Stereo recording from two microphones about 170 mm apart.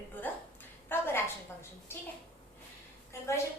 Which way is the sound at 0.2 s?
10° left (ahead or behind).